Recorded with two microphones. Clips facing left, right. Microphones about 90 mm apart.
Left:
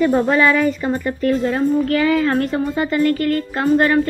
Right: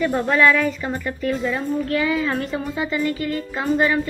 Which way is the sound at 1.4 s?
55° left (ahead or behind).